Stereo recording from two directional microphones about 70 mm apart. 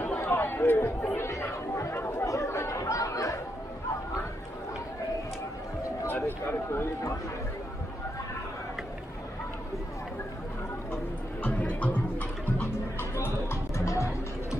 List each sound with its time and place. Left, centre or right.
0.0 s chatter: left
6.0 s a sound: left
11.4 s music: left
13.1 s music: left